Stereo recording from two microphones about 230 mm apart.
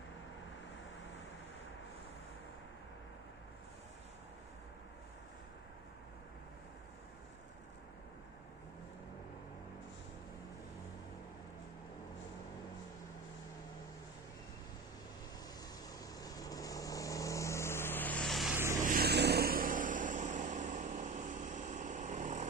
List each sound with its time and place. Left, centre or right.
15.9 s vehicle: centre
18.9 s vehicle: right